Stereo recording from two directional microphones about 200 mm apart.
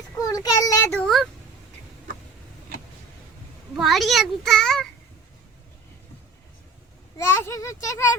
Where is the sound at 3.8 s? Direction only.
Centre (ahead or behind).